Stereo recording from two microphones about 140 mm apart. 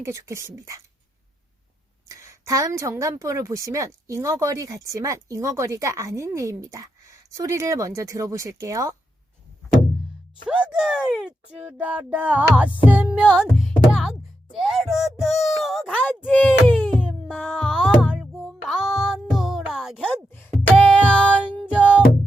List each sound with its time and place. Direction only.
0.0 s a woman's voice: 20° right (ahead or behind)
2.0 s a woman's voice: 20° right (ahead or behind)
10.4 s speech: 5° right (ahead or behind)
13.2 s music: 5° left (ahead or behind)
16.0 s a sound: 10° left (ahead or behind)
17.6 s music: centre (ahead or behind)
20.0 s music: 15° left (ahead or behind)